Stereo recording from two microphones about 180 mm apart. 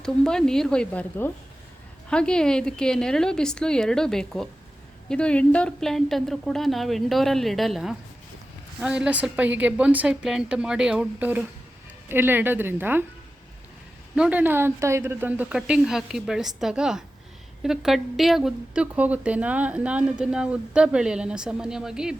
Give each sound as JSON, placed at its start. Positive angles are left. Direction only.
{"t": 0.0, "sound": "a woman's voice", "side_deg": 5}
{"t": 14.2, "sound": "a woman's voice", "side_deg": -10}